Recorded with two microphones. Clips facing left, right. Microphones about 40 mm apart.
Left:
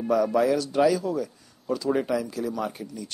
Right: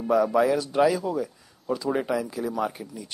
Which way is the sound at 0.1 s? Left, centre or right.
Centre.